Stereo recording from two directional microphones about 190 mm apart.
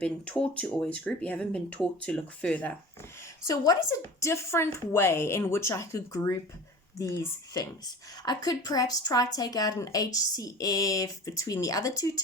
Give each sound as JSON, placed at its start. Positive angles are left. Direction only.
{"t": 0.0, "sound": "a woman's voice", "side_deg": 5}
{"t": 3.4, "sound": "a woman's voice", "side_deg": 15}